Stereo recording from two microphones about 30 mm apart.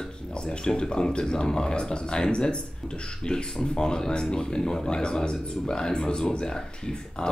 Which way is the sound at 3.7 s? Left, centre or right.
Left.